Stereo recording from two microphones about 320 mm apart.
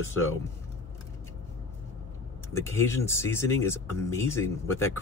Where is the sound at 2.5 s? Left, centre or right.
Centre.